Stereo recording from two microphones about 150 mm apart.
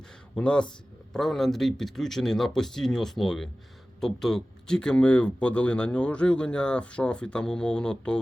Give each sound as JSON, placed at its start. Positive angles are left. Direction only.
{"t": 0.3, "sound": "speech", "side_deg": 5}